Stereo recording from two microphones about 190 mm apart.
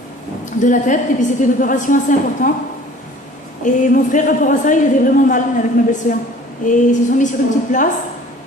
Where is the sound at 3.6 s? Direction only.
40° left (ahead or behind).